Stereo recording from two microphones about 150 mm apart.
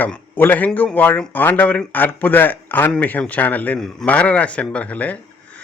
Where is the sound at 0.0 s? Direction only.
10° left (ahead or behind).